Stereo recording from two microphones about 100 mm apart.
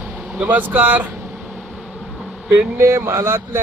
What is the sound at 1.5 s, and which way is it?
Vehicle, 5° right (ahead or behind).